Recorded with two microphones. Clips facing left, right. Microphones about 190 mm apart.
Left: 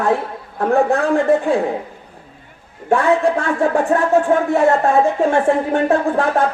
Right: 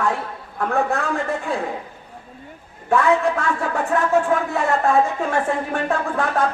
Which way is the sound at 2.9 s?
30° left (ahead or behind).